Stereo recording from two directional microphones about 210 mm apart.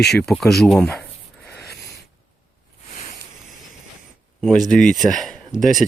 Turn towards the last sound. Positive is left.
turn(degrees=0)  # may be behind; listen again after turning